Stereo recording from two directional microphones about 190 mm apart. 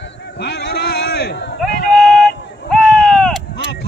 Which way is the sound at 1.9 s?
5° left (ahead or behind).